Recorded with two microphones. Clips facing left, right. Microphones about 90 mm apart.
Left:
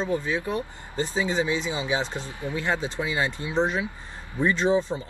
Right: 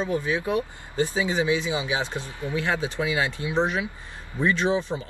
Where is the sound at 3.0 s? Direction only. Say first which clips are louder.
Right 1 dB; 15° right (ahead or behind).